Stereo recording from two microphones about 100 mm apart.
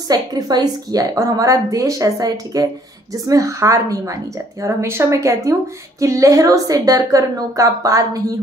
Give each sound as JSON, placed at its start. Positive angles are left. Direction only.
{"t": 0.1, "sound": "a woman's voice", "side_deg": -40}